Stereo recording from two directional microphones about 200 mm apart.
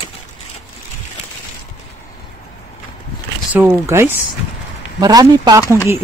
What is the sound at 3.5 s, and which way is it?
Speech, 10° right (ahead or behind).